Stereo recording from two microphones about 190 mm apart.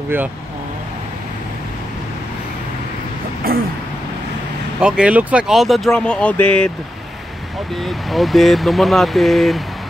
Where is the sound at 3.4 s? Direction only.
50° right (ahead or behind).